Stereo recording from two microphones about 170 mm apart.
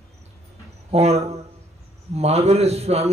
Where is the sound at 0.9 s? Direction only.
40° right (ahead or behind).